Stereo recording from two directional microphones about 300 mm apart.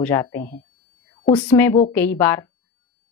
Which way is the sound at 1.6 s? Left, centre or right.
Centre.